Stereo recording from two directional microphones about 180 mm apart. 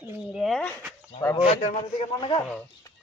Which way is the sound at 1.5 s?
35° left (ahead or behind).